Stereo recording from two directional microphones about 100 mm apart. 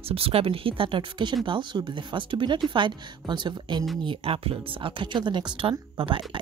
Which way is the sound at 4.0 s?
65° right (ahead or behind).